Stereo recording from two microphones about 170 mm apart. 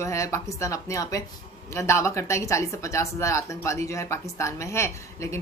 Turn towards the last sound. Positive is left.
turn(degrees=15)  # may be behind; listen again after turning